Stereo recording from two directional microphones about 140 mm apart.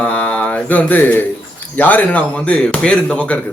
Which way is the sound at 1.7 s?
10° left (ahead or behind).